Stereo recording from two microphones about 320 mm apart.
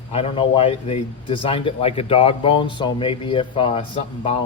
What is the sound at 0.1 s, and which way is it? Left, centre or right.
A man's voice, centre.